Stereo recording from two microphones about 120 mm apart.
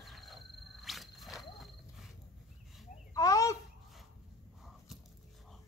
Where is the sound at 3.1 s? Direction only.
30° left (ahead or behind).